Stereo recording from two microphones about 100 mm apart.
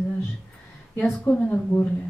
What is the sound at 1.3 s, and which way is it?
Speech, 20° left (ahead or behind).